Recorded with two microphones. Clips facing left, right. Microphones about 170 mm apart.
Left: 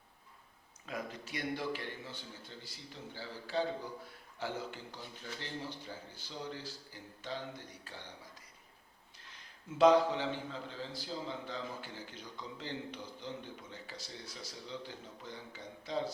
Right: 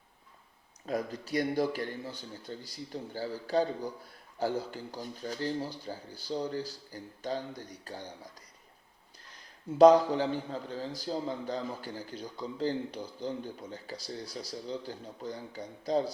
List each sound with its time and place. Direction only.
0.9 s a man's voice: 35° right (ahead or behind)